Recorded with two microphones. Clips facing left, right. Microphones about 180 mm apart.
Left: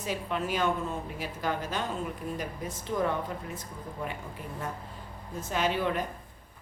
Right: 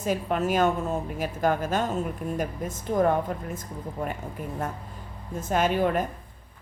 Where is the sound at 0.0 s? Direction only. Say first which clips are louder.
Right 6 dB; 45° right (ahead or behind).